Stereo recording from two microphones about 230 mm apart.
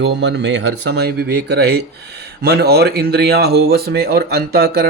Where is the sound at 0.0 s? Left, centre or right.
Right.